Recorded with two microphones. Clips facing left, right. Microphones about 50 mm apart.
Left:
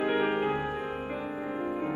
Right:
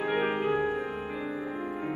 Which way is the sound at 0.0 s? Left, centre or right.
Left.